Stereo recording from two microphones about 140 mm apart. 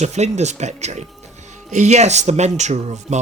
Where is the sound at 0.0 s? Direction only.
55° right (ahead or behind).